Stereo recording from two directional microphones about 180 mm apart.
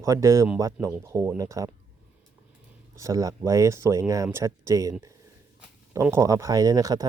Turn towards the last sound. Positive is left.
turn(degrees=-20)  # may be behind; listen again after turning